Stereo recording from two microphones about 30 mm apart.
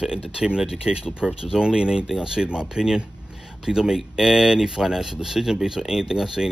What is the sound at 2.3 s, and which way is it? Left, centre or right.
Speech, right.